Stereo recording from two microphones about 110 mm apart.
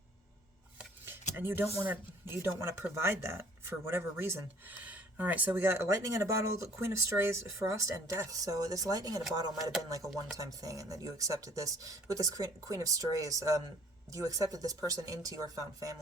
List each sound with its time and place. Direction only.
1.4 s speech: 20° right (ahead or behind)